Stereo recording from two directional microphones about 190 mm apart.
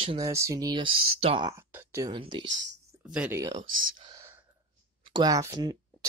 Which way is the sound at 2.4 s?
75° right (ahead or behind).